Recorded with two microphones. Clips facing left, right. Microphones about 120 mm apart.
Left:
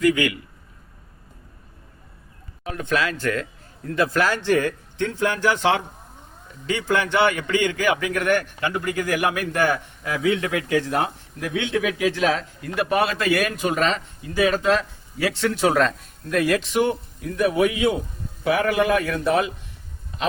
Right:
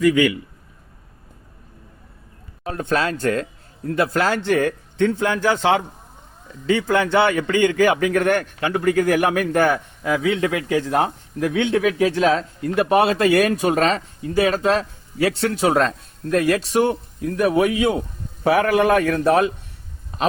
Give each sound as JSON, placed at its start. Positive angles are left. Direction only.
{"t": 2.6, "sound": "speech", "side_deg": -40}
{"t": 6.7, "sound": "speech", "side_deg": -30}
{"t": 7.6, "sound": "speech", "side_deg": -40}
{"t": 10.0, "sound": "a man's voice", "side_deg": -30}